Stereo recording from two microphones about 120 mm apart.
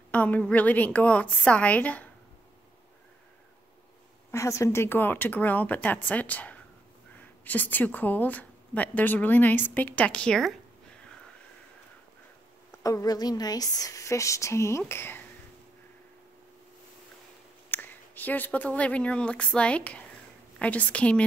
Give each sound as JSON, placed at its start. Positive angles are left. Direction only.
{"t": 0.1, "sound": "a woman's voice", "side_deg": 10}
{"t": 4.3, "sound": "a woman's voice", "side_deg": 25}
{"t": 12.8, "sound": "speech", "side_deg": 30}
{"t": 17.6, "sound": "a woman's voice", "side_deg": 15}